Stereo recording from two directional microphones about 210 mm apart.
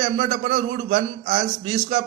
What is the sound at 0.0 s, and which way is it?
A man's voice, 30° right (ahead or behind).